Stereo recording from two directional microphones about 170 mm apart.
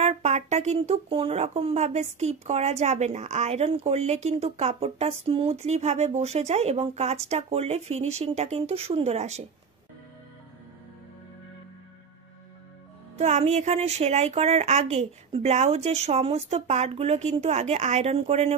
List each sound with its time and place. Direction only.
0.0 s speech: 40° right (ahead or behind)
13.2 s speech: 40° right (ahead or behind)